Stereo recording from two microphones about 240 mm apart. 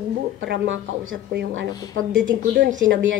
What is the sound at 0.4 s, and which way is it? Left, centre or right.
Speech, right.